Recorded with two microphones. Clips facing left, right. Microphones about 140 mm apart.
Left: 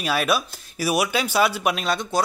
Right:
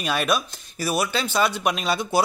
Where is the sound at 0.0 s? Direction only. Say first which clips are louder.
Left 1 dB; 5° left (ahead or behind).